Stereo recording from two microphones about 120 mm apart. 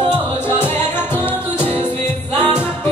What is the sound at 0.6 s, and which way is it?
Music, 20° left (ahead or behind).